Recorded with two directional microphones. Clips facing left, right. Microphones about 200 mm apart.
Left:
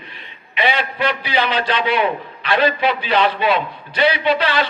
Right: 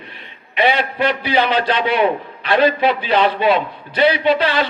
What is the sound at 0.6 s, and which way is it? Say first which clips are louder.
A man's voice: right 3 dB; 50° right (ahead or behind).